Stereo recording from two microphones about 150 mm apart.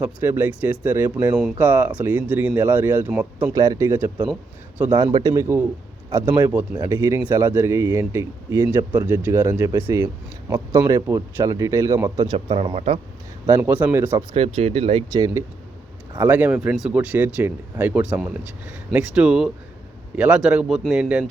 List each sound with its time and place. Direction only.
0.0 s speech: 15° right (ahead or behind)
3.5 s speech: 25° right (ahead or behind)
12.2 s speech: 35° right (ahead or behind)
13.5 s speech: 15° right (ahead or behind)
14.3 s speech: 40° right (ahead or behind)
15.1 s speech: 25° right (ahead or behind); by 21.2 s 5° right (ahead or behind)